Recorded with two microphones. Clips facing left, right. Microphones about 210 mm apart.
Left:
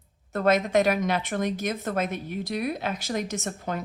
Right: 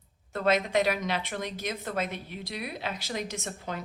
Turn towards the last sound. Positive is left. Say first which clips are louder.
# left 5 dB
turn(degrees=50)  # may be behind; listen again after turning